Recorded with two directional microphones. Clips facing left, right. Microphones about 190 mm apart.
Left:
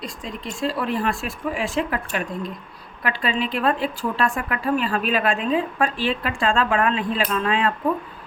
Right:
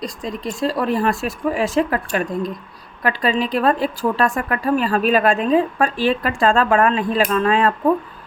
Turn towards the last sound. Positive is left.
turn(degrees=-40)  # may be behind; listen again after turning